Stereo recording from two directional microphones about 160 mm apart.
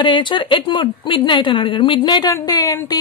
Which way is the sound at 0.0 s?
30° left (ahead or behind).